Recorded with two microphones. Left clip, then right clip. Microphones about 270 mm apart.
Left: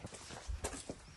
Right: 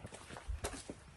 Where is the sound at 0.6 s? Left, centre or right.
Centre.